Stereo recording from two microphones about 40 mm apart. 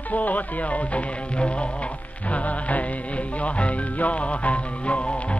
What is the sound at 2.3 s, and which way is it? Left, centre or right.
Music, left.